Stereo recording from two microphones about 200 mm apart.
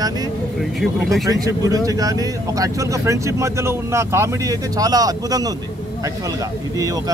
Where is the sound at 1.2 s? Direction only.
20° right (ahead or behind).